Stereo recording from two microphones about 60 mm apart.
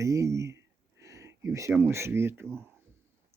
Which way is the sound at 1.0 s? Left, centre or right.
Right.